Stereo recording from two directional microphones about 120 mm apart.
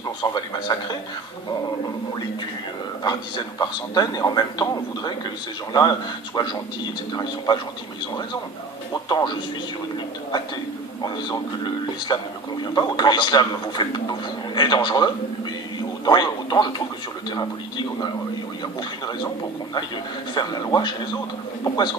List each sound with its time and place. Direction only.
0.2 s speech: 35° left (ahead or behind)
3.0 s speech: 35° left (ahead or behind)
8.9 s speech: 35° left (ahead or behind)
11.0 s speech: 35° left (ahead or behind)
20.3 s speech: 35° left (ahead or behind)